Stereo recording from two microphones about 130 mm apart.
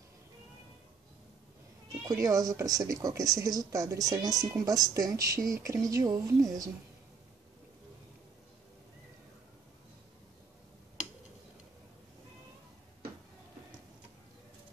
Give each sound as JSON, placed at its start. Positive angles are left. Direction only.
{"t": 2.0, "sound": "a woman's voice", "side_deg": -25}